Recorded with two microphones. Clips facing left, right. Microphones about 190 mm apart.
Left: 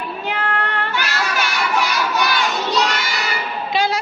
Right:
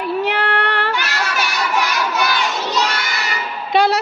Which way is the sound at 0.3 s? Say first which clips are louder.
Right 4 dB; 75° right (ahead or behind).